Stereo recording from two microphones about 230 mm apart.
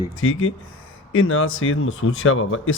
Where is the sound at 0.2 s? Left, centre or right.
Left.